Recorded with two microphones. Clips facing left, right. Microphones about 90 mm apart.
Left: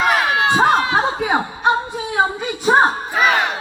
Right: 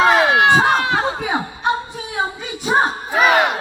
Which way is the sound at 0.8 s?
30° left (ahead or behind).